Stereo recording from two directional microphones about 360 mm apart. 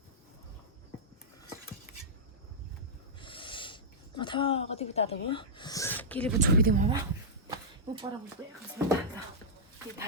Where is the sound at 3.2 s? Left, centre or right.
Centre.